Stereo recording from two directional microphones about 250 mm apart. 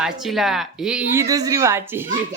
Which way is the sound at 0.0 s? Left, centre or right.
Centre.